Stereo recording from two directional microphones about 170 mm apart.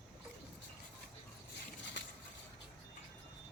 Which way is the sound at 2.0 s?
90° left.